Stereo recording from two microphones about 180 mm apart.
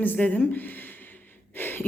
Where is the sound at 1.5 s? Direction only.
10° left (ahead or behind).